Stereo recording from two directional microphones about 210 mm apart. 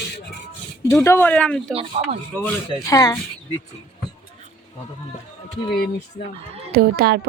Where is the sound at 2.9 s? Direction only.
15° left (ahead or behind).